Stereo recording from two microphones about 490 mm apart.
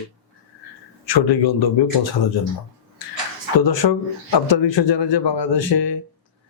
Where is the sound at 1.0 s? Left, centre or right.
Left.